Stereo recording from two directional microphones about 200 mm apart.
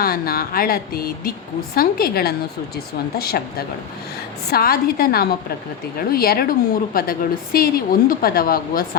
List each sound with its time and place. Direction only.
0.0 s a woman's voice: 50° left (ahead or behind)
4.5 s a woman's voice: 50° left (ahead or behind)